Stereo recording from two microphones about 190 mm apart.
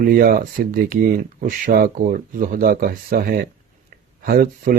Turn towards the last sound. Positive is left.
turn(degrees=-50)  # may be behind; listen again after turning